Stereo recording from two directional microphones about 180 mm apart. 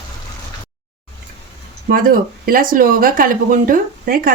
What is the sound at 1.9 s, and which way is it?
Speech, 50° right (ahead or behind).